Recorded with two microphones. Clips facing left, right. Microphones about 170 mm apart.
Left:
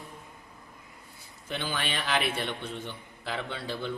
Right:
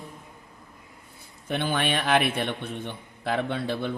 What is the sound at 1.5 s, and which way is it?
A man's voice, 55° right (ahead or behind).